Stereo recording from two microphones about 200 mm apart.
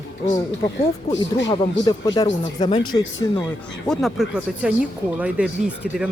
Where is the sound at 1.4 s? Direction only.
20° left (ahead or behind).